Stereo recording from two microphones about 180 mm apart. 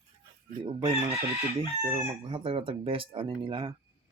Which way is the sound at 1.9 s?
30° right (ahead or behind).